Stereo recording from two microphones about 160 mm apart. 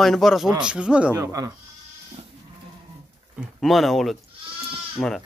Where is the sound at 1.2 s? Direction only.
20° right (ahead or behind).